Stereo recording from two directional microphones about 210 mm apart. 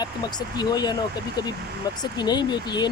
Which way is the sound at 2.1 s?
20° left (ahead or behind).